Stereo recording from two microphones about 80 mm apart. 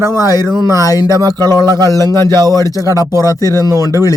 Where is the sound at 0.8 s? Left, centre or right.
Left.